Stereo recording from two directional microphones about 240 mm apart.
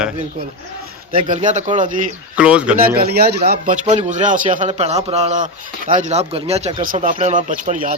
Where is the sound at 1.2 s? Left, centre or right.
Right.